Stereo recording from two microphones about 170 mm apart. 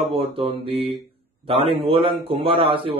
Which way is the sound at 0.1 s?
35° right (ahead or behind).